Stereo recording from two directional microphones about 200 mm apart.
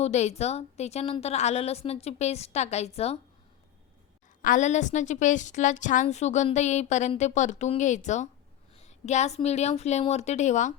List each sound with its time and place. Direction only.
0.0 s a woman's voice: 35° left (ahead or behind)
4.4 s a woman's voice: 40° left (ahead or behind)